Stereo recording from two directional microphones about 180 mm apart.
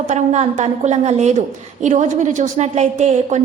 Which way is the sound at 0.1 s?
40° right (ahead or behind).